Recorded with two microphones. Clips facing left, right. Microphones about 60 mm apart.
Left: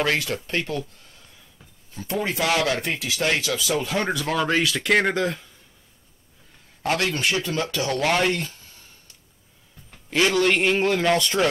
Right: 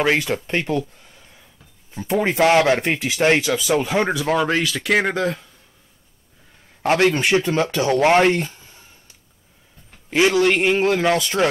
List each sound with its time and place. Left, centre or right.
0.0 s speech: right
2.0 s speech: right; by 5.5 s centre
6.9 s a man's voice: right
10.3 s speech: centre